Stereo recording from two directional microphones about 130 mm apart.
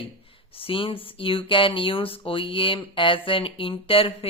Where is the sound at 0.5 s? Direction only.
45° left (ahead or behind).